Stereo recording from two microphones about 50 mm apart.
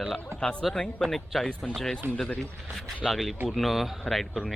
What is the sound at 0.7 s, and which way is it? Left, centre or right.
Speech, centre.